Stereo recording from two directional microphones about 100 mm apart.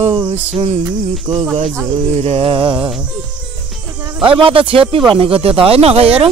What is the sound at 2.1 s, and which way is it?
Music, 80° right.